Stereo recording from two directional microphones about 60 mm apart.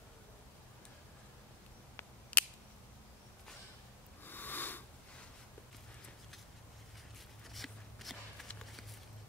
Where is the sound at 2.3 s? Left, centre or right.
Left.